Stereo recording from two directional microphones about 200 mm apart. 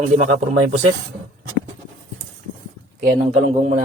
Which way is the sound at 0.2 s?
35° right (ahead or behind).